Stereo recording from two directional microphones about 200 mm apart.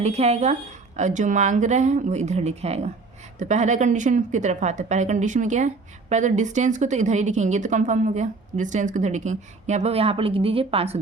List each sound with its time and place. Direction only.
0.0 s a woman's voice: 35° right (ahead or behind)